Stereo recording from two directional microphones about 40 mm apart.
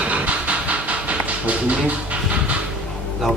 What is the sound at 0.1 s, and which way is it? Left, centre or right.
Train, right.